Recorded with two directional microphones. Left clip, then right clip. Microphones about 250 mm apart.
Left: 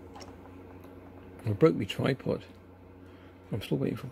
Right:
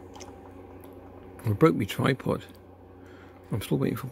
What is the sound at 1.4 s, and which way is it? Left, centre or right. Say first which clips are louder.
Speech: right 2 dB; centre.